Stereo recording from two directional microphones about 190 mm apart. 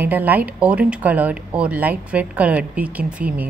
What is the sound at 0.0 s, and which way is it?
A woman's voice, 10° right (ahead or behind).